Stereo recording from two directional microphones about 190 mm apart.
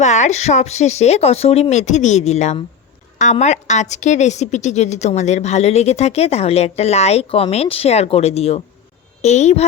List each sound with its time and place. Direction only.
0.0 s a woman's voice: 40° left (ahead or behind)